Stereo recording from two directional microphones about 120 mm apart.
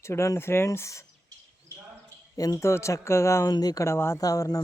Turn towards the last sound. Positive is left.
turn(degrees=30)  # may be behind; listen again after turning